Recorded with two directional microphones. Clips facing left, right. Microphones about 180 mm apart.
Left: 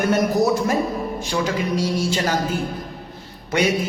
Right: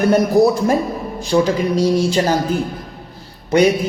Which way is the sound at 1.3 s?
30° right (ahead or behind).